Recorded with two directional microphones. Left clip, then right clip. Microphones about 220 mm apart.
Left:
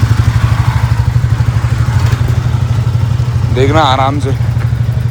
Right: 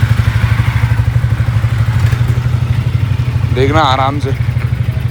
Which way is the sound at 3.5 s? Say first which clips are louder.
Left 1 dB; 15° left (ahead or behind).